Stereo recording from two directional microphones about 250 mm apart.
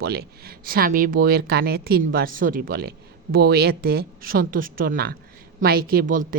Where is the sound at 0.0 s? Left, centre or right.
Right.